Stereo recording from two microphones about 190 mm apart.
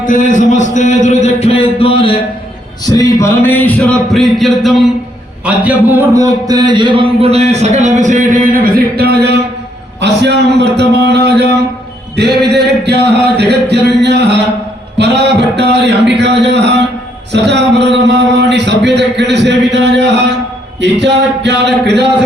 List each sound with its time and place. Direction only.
0.0 s a man's voice: 45° left (ahead or behind)
2.8 s a sound: 20° left (ahead or behind); by 4.8 s centre (ahead or behind)
5.5 s a man's voice: 10° right (ahead or behind); by 22.0 s 65° right (ahead or behind)